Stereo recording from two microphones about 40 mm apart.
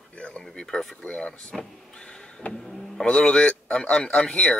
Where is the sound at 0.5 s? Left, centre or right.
Centre.